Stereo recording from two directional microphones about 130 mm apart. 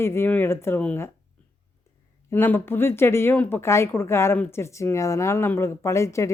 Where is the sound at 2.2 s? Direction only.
15° left (ahead or behind).